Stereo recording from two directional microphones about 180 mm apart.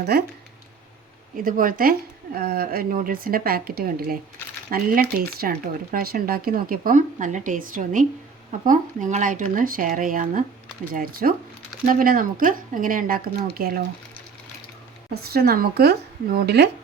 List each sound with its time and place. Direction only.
0.0 s speech: 60° right (ahead or behind)
1.4 s speech: 50° right (ahead or behind)
15.1 s speech: 60° right (ahead or behind)